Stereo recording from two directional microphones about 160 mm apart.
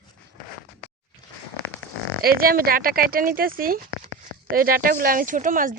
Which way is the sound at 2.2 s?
65° right (ahead or behind).